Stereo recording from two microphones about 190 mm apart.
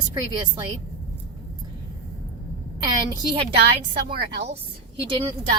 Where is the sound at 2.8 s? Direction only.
25° right (ahead or behind).